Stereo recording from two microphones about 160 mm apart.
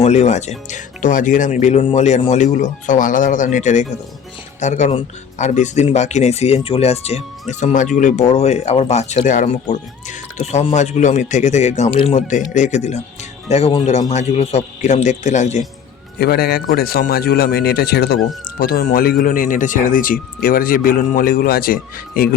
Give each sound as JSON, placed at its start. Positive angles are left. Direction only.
{"t": 0.0, "sound": "speech", "side_deg": 45}
{"t": 16.1, "sound": "a man's voice", "side_deg": 80}